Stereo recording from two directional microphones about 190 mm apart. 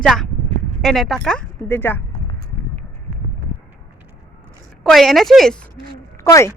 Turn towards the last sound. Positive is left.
turn(degrees=15)  # may be behind; listen again after turning